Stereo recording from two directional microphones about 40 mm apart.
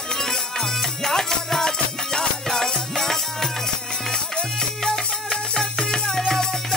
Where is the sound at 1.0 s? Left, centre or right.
Centre.